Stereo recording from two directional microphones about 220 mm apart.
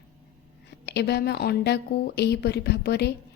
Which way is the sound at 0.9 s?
50° left (ahead or behind).